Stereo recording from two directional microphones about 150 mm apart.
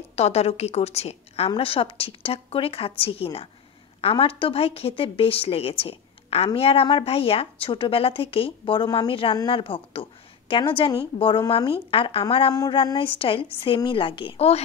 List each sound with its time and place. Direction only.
0.1 s a woman's voice: 45° left (ahead or behind)
12.5 s a woman's voice: 25° left (ahead or behind)